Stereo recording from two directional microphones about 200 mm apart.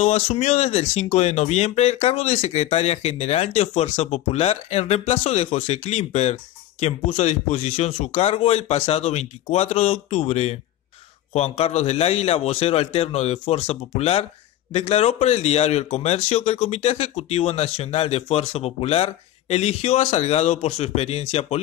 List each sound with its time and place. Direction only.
0.0 s speech: 35° left (ahead or behind)